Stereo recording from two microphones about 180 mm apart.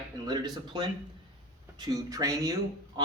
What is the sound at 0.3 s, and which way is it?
Speech, 20° right (ahead or behind).